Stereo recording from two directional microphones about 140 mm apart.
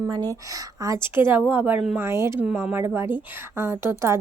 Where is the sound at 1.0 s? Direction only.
15° right (ahead or behind).